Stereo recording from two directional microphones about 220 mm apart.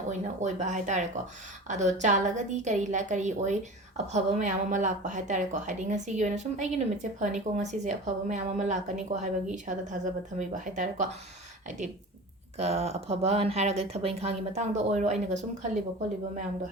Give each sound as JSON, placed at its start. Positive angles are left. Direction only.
{"t": 0.1, "sound": "a woman's voice", "side_deg": -35}
{"t": 12.5, "sound": "speech", "side_deg": -30}